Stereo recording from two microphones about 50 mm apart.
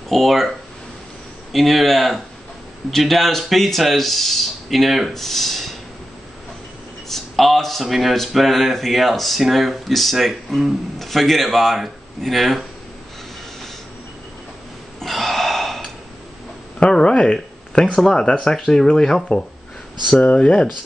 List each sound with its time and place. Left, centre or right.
0.1 s speech: centre
7.1 s speech: centre
15.0 s gasp: centre
16.8 s speech: left
20.1 s speech: left